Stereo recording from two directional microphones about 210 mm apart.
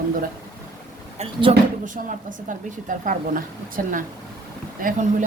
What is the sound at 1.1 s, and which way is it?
Speech, 30° right (ahead or behind).